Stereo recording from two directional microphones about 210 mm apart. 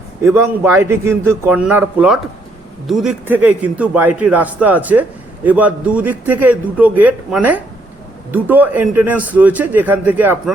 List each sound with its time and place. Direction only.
0.2 s a man's voice: 10° right (ahead or behind)